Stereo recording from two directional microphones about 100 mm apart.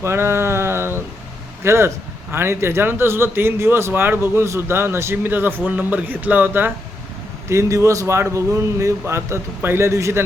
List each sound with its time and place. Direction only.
0.0 s a sound: 25° right (ahead or behind)
1.6 s a man's voice: 25° right (ahead or behind)
7.5 s a man's voice: 30° right (ahead or behind)